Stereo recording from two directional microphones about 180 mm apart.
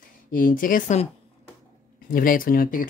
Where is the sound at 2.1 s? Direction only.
50° left (ahead or behind).